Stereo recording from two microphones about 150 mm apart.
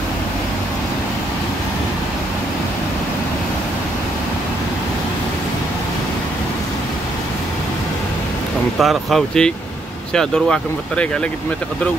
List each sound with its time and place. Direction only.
8.7 s speech: centre (ahead or behind)